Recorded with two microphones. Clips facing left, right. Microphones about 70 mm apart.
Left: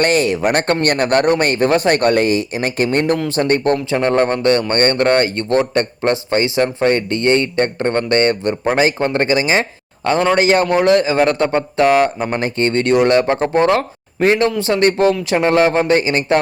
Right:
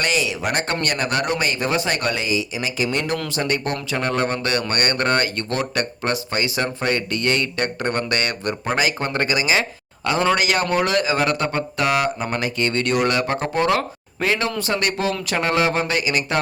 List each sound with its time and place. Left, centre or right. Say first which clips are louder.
0.0 s speech: left 8 dB; left
3.9 s speech: left 4 dB; left
15.3 s speech: left 7 dB; left